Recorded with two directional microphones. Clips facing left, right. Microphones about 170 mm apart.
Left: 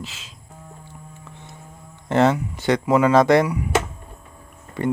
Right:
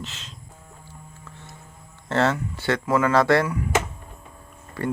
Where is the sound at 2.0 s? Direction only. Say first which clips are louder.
Left 4 dB; 15° left (ahead or behind).